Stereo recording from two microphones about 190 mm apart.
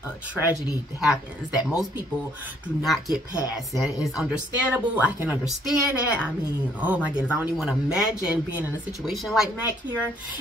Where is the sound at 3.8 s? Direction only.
20° left (ahead or behind).